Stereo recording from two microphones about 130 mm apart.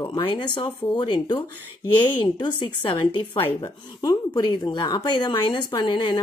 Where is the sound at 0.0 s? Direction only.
35° left (ahead or behind).